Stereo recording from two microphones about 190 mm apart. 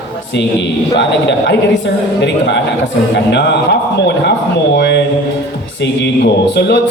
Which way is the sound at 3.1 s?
65° left (ahead or behind).